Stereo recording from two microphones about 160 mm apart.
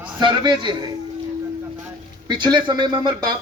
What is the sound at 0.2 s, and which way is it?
Speech, 30° right (ahead or behind).